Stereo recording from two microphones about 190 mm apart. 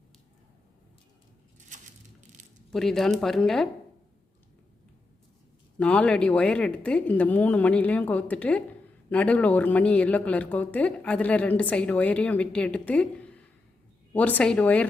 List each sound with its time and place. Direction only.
1.7 s a sound: 40° right (ahead or behind)
2.6 s speech: centre (ahead or behind)
5.8 s speech: 5° left (ahead or behind)